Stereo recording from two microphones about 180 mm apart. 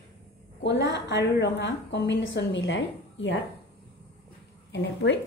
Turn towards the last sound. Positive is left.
turn(degrees=80)